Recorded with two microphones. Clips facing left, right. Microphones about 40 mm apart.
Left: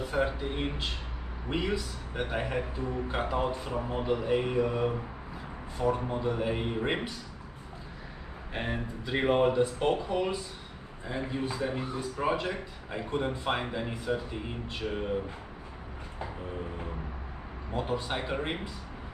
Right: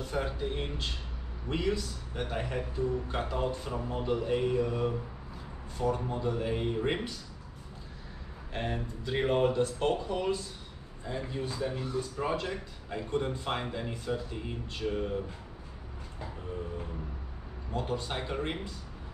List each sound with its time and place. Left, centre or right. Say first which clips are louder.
0.0 s speech: left 3 dB; centre
8.5 s speech: left 1 dB; centre
17.7 s speech: left 2 dB; centre